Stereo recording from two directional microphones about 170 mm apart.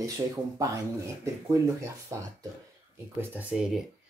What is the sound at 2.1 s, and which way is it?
Speech, 15° right (ahead or behind).